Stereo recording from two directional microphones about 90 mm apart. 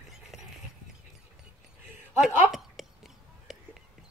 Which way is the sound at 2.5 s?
5° right (ahead or behind).